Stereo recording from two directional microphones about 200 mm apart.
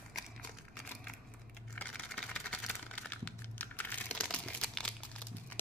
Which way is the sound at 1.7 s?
5° left (ahead or behind).